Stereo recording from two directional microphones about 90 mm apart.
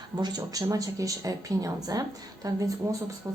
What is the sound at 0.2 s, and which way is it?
Speech, 50° right (ahead or behind).